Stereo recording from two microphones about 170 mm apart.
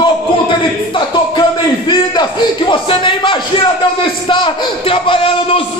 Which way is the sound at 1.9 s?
25° left (ahead or behind).